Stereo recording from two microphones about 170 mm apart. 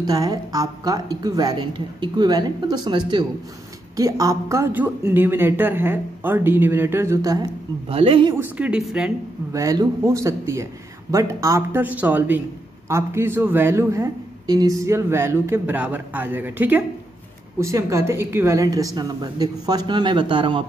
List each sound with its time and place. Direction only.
0.0 s a woman's voice: 20° right (ahead or behind)
7.9 s speech: 35° right (ahead or behind)
8.4 s speech: 5° right (ahead or behind)
9.5 s a woman's voice: 20° right (ahead or behind)